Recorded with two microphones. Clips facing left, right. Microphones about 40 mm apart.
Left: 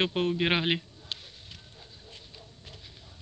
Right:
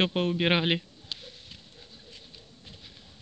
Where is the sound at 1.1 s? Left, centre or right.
Left.